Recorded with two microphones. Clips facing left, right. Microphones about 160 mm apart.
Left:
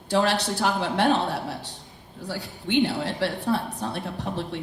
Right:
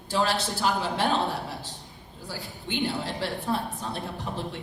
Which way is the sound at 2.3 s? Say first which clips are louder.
Left 6 dB; 70° left (ahead or behind).